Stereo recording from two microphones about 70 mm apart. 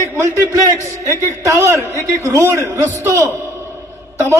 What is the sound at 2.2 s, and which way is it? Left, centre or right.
A man's voice, right.